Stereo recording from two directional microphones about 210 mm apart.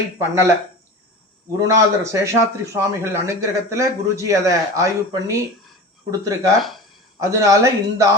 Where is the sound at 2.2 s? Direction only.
15° right (ahead or behind).